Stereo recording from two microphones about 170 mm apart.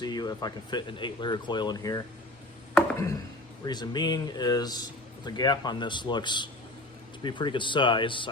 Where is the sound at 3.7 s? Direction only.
25° left (ahead or behind).